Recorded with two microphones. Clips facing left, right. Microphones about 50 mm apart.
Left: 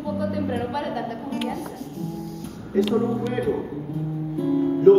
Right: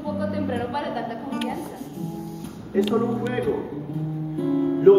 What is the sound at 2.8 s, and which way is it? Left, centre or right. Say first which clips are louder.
Speech: even; centre.